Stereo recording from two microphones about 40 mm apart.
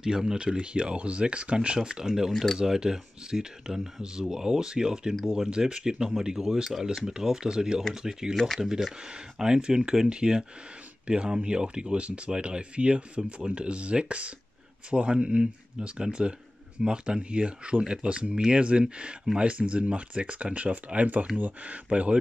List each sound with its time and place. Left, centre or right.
0.0 s speech: centre
0.4 s speech: right
2.3 s speech: centre
2.6 s speech: centre; by 22.2 s right